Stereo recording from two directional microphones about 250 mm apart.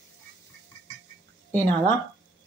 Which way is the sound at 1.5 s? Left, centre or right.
Centre.